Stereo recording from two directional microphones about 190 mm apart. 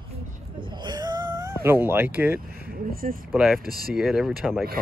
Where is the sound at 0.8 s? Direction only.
20° right (ahead or behind).